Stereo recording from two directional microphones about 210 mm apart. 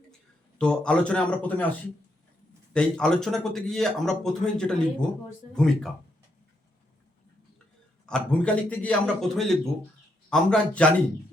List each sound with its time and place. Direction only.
0.6 s speech: 5° left (ahead or behind)
2.7 s speech: 5° left (ahead or behind)
8.0 s speech: 5° left (ahead or behind)